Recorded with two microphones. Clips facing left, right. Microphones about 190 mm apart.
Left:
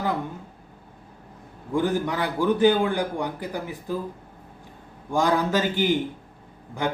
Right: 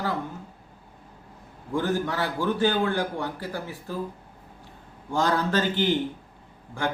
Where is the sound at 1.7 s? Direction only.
15° left (ahead or behind).